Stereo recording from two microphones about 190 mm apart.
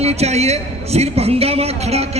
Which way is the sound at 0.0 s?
35° right (ahead or behind).